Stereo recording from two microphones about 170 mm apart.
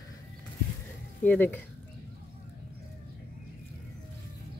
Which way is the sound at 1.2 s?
10° left (ahead or behind).